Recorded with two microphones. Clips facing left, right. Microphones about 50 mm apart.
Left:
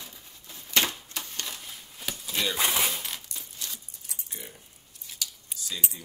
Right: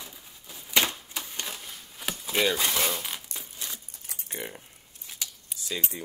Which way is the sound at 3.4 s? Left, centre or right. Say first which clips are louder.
Right 1 dB; right.